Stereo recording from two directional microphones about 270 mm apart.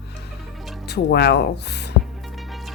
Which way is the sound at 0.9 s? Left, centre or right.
Left.